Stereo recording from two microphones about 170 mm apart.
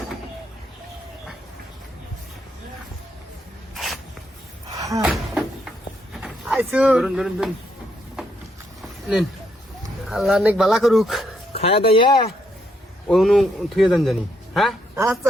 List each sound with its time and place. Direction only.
3.8 s a sound: centre (ahead or behind)
4.8 s slam: 20° right (ahead or behind)
5.0 s a sound: 5° right (ahead or behind)
6.2 s speech: 5° right (ahead or behind)
8.8 s a sound: centre (ahead or behind)
10.1 s a man's voice: centre (ahead or behind)
11.5 s speech: 35° left (ahead or behind)
13.1 s a man's voice: centre (ahead or behind)
14.9 s a woman's voice: 15° right (ahead or behind)